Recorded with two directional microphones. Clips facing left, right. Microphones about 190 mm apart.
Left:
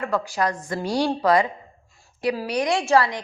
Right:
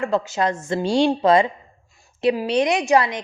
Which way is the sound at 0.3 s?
25° right (ahead or behind).